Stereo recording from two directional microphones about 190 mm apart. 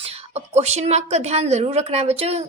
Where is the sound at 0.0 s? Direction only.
35° right (ahead or behind).